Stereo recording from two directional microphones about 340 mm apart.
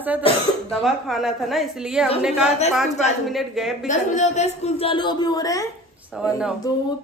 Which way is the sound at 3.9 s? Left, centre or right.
Centre.